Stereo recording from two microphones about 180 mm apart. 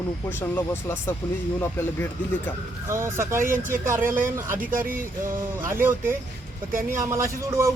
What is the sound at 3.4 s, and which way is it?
Speech, 50° right (ahead or behind).